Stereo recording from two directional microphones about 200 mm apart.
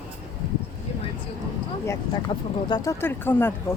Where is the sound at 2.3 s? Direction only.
25° left (ahead or behind).